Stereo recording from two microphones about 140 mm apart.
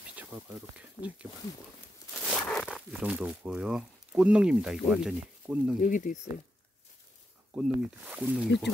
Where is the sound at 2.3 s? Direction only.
5° left (ahead or behind).